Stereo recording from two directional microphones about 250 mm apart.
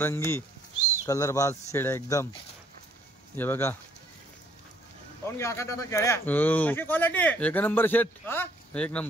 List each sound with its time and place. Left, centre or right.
0.0 s speech: centre
3.3 s speech: centre
5.2 s speech: centre